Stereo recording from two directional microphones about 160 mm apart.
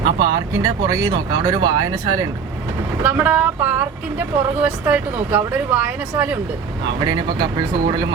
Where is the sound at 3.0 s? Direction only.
10° right (ahead or behind).